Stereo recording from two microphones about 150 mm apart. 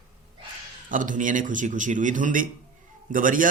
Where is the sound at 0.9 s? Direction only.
60° right (ahead or behind).